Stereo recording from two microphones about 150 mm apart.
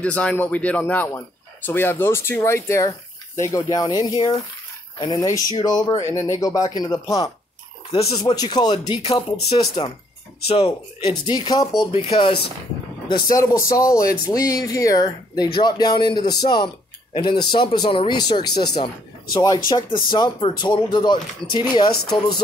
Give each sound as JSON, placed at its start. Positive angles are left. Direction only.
{"t": 0.0, "sound": "speech", "side_deg": 10}
{"t": 7.9, "sound": "speech", "side_deg": 45}
{"t": 8.2, "sound": "speech", "side_deg": 30}
{"t": 13.3, "sound": "speech", "side_deg": 20}